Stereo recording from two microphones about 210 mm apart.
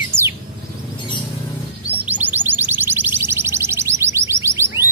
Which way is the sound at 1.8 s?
10° right (ahead or behind).